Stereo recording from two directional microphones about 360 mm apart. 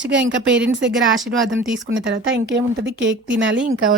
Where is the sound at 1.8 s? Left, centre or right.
Right.